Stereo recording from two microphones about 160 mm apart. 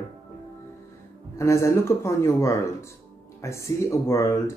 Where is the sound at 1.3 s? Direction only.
20° left (ahead or behind).